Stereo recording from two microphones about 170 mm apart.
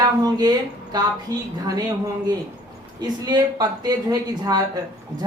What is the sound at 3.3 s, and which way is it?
A woman's voice, 25° right (ahead or behind).